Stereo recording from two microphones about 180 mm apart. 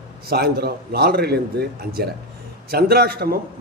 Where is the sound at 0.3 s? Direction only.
60° right (ahead or behind).